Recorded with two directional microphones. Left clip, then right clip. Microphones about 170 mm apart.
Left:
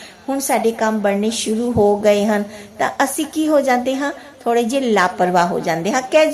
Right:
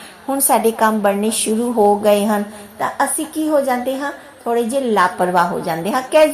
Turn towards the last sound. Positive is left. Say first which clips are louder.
# right 1 dB
turn(degrees=15)  # may be behind; listen again after turning